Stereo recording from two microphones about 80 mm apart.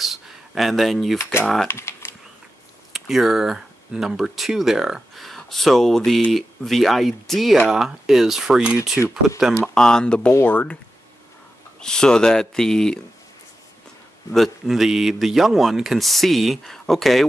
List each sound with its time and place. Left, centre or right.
0.0 s a sound: centre
1.3 s speech: left
1.7 s typing: left
2.9 s speech: centre
9.8 s speech: centre
11.8 s speech: centre
14.3 s speech: centre